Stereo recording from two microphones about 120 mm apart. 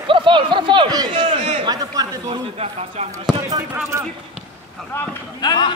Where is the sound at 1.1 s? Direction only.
50° right (ahead or behind).